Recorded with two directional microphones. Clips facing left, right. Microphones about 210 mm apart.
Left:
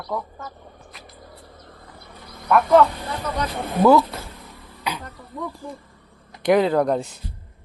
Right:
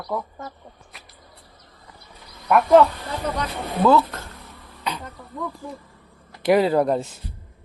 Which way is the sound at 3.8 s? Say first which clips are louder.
Left 2 dB; 10° left (ahead or behind).